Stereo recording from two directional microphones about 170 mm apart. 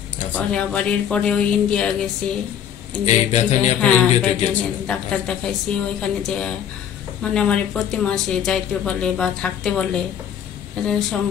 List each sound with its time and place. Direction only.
0.3 s speech: 5° left (ahead or behind)
3.1 s speech: 40° left (ahead or behind)
3.8 s speech: 5° left (ahead or behind)